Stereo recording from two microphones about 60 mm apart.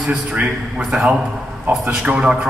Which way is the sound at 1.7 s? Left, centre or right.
Right.